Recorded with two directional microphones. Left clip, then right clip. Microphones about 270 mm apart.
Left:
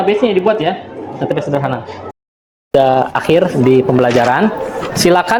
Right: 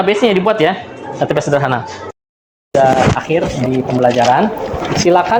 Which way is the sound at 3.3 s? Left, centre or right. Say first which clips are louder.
Left 4 dB; left.